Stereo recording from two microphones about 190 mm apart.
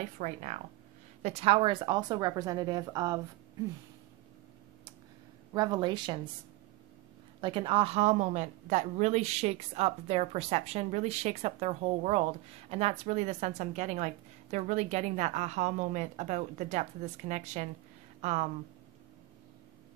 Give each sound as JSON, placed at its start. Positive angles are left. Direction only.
{"t": 0.2, "sound": "a woman's voice", "side_deg": -40}
{"t": 5.5, "sound": "a woman's voice", "side_deg": -20}
{"t": 7.3, "sound": "a woman's voice", "side_deg": -25}